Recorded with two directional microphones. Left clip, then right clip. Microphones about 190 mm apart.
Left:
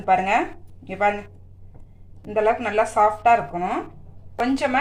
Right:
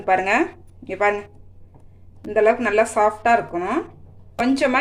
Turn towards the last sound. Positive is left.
turn(degrees=-40)  # may be behind; listen again after turning